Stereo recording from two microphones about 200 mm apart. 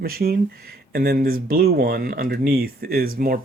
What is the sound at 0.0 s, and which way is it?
Speech, 50° right (ahead or behind).